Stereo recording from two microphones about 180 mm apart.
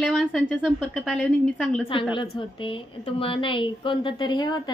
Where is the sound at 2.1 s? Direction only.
30° left (ahead or behind).